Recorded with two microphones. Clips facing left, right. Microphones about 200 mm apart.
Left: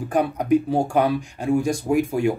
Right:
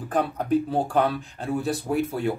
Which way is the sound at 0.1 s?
15° left (ahead or behind).